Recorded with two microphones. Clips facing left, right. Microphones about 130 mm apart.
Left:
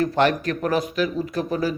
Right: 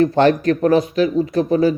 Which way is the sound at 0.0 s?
30° right (ahead or behind).